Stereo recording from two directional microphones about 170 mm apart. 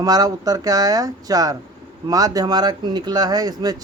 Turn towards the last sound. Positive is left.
turn(degrees=-25)  # may be behind; listen again after turning